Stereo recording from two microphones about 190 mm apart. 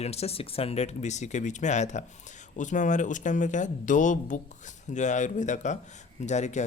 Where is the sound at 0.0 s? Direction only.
35° left (ahead or behind).